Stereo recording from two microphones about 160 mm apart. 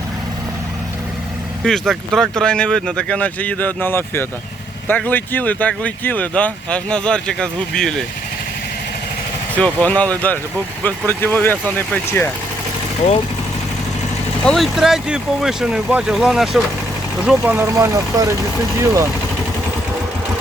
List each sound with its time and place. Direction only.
1.6 s speech: centre (ahead or behind)
9.6 s speech: 10° left (ahead or behind)
14.4 s speech: centre (ahead or behind); by 19.0 s 15° right (ahead or behind)